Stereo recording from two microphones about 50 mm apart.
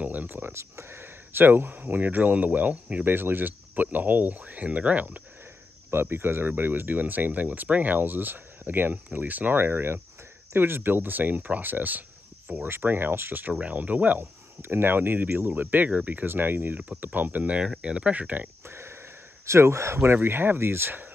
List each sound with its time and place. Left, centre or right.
0.0 s a sound: right
0.6 s speech: right
3.1 s speech: right
5.9 s speech: right
12.6 s speech: right
13.5 s speech: right
13.7 s speech: right
14.6 s speech: right
16.3 s speech: right
18.7 s sniff: right
19.4 s speech: right
20.2 s speech: right